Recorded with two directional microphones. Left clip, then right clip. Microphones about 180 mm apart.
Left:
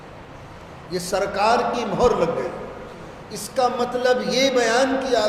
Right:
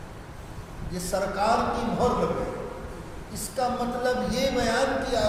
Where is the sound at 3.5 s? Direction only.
40° left (ahead or behind).